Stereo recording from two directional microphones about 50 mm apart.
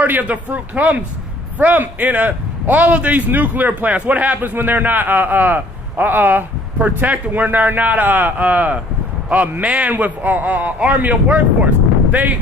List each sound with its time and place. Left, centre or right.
0.0 s a man's voice: right